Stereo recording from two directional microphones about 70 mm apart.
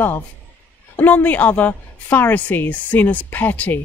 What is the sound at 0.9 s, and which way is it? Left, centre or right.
A woman's voice, left.